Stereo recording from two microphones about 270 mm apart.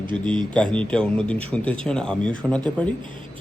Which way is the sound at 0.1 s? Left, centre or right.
Centre.